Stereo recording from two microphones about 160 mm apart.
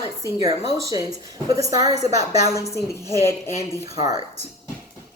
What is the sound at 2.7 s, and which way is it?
Speech, 15° left (ahead or behind).